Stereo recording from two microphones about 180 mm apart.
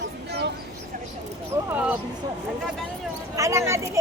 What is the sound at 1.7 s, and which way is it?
Speech, 10° right (ahead or behind).